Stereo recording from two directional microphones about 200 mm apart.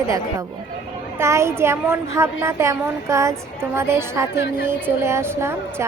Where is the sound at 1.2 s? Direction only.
15° right (ahead or behind).